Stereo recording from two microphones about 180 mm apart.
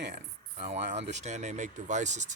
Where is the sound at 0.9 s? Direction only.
75° right (ahead or behind).